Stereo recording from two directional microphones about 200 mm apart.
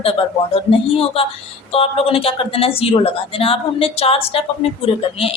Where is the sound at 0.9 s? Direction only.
30° left (ahead or behind).